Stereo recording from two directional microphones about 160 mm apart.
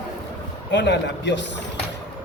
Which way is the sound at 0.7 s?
90° left.